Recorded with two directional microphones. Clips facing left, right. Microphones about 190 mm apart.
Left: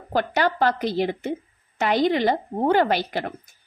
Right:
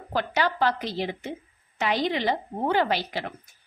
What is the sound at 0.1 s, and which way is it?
A woman's voice, 50° left (ahead or behind).